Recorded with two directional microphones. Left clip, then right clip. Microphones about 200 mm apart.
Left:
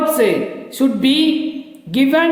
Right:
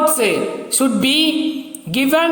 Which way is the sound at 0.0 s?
15° right (ahead or behind).